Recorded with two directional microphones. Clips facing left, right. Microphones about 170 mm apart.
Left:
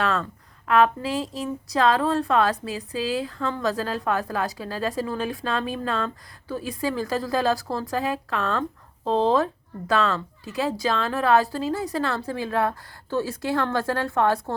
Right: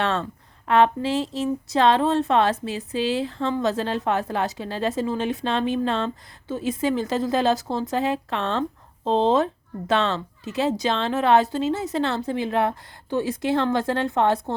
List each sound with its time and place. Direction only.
0.0 s a woman's voice: 25° right (ahead or behind)